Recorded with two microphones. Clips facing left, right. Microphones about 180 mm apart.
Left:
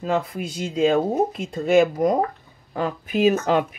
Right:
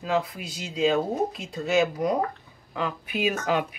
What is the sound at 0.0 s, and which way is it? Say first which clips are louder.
Speech: left 3 dB; 50° left (ahead or behind).